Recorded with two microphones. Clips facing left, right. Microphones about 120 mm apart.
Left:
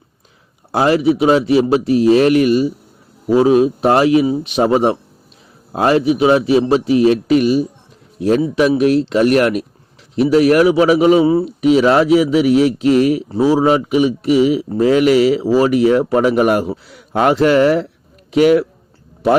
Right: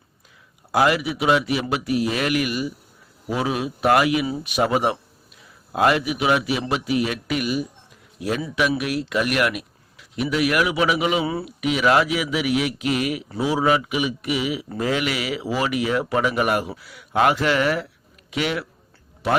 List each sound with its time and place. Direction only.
0.7 s a man's voice: 30° left (ahead or behind)